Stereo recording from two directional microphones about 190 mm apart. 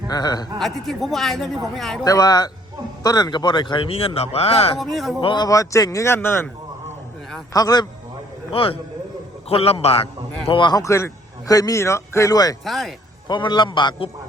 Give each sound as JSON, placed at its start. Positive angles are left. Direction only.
{"t": 0.1, "sound": "a man's voice", "side_deg": 20}
{"t": 0.6, "sound": "a man's voice", "side_deg": 0}
{"t": 2.0, "sound": "a man's voice", "side_deg": 20}
{"t": 4.8, "sound": "a man's voice", "side_deg": 0}
{"t": 5.2, "sound": "a man's voice", "side_deg": 20}
{"t": 7.5, "sound": "a man's voice", "side_deg": 20}
{"t": 12.6, "sound": "a man's voice", "side_deg": 0}
{"t": 13.2, "sound": "a man's voice", "side_deg": 25}